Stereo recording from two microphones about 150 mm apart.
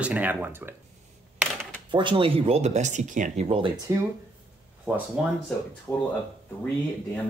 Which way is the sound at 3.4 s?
40° right (ahead or behind).